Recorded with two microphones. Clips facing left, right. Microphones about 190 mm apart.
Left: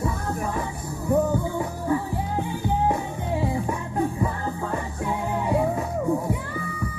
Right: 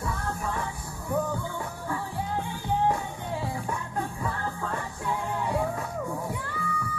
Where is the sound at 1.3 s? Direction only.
20° left (ahead or behind).